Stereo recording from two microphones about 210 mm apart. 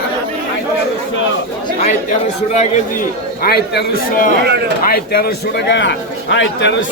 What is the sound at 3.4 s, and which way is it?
A man's voice, 45° left (ahead or behind).